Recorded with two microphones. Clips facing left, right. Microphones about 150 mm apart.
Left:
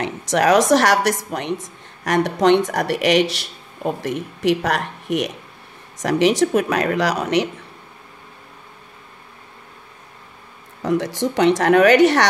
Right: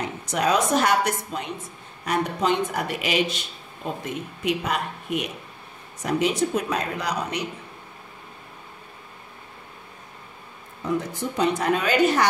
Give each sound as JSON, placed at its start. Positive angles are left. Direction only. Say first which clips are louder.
{"t": 0.0, "sound": "a woman's voice", "louder": "left 6 dB", "side_deg": 85}
{"t": 10.8, "sound": "a woman's voice", "louder": "left 6 dB", "side_deg": 90}